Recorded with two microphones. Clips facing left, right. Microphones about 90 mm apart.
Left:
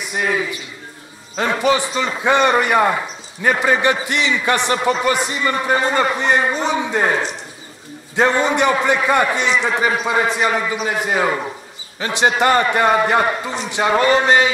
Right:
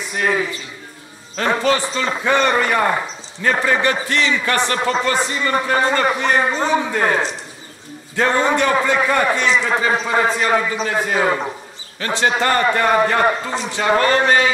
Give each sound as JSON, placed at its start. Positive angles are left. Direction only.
{"t": 1.3, "sound": "a man's voice", "side_deg": 15}
{"t": 8.2, "sound": "a man's voice", "side_deg": 20}